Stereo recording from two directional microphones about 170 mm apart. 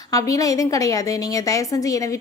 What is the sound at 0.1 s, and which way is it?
A woman's voice, 20° left (ahead or behind).